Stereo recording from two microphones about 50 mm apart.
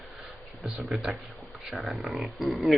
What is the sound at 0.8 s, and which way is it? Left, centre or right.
Speech, centre.